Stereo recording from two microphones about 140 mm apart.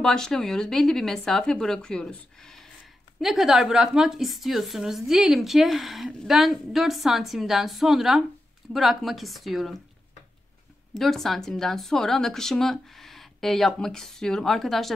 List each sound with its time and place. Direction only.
0.0 s a woman's voice: 5° left (ahead or behind)
11.0 s a woman's voice: centre (ahead or behind)